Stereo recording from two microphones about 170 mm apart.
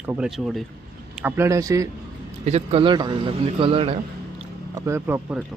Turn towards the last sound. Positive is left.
turn(degrees=-15)  # may be behind; listen again after turning